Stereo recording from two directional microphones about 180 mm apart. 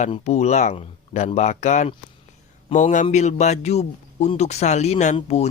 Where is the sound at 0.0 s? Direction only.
35° left (ahead or behind).